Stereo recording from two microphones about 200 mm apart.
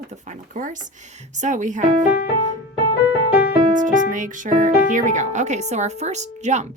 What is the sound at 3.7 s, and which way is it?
Speech, 40° right (ahead or behind).